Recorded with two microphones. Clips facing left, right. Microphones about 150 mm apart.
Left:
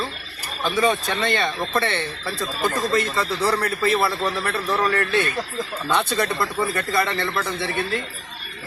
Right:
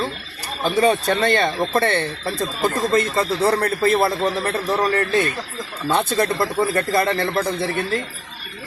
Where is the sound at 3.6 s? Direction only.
45° right (ahead or behind).